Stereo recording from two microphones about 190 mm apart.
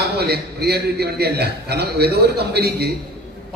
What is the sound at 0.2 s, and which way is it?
A man's voice, 60° right (ahead or behind).